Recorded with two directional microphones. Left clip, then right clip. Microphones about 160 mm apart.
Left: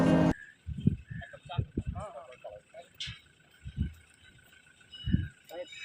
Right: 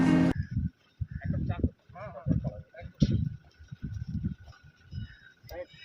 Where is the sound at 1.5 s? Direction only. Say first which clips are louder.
Right 2 dB; centre (ahead or behind).